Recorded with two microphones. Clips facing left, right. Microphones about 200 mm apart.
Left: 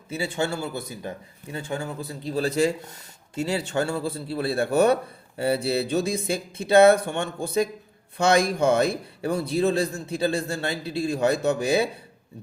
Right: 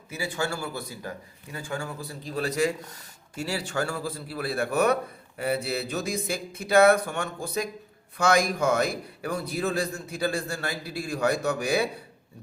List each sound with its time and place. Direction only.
0.1 s speech: 25° left (ahead or behind)